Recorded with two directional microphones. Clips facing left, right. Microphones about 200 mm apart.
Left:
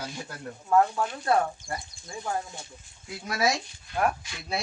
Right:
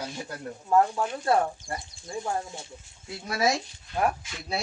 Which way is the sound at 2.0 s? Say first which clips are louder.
Right 2 dB; 25° right (ahead or behind).